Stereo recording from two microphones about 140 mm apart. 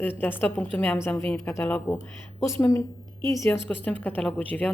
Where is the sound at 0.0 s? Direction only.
15° left (ahead or behind).